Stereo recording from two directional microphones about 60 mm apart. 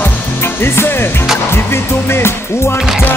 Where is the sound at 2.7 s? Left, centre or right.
Centre.